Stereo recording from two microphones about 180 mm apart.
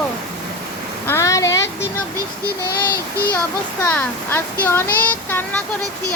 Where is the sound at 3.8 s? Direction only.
10° left (ahead or behind).